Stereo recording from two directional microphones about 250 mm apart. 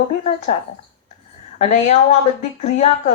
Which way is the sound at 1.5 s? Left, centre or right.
Left.